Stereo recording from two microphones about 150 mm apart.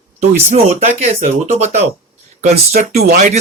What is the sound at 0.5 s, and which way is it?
Speech, 45° right (ahead or behind).